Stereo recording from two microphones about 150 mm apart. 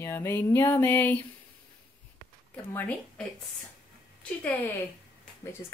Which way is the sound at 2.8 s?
10° left (ahead or behind).